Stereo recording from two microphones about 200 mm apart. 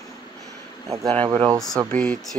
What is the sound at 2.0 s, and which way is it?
Speech, 5° left (ahead or behind).